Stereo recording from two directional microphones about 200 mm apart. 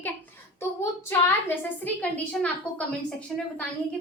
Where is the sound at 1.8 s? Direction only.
5° left (ahead or behind).